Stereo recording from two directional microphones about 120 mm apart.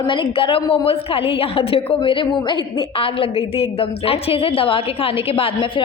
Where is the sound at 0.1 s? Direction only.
45° left (ahead or behind).